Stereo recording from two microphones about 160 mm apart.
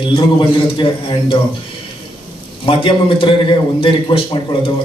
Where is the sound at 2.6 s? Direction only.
35° left (ahead or behind).